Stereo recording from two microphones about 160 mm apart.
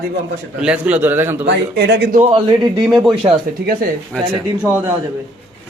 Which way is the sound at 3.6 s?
65° right (ahead or behind).